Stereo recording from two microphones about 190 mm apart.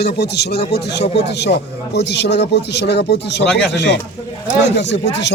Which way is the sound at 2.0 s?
60° left (ahead or behind).